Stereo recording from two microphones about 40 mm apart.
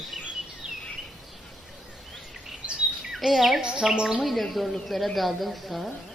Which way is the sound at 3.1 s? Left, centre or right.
Centre.